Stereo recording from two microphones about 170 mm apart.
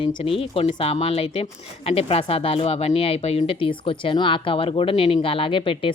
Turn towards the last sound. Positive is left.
turn(degrees=30)  # may be behind; listen again after turning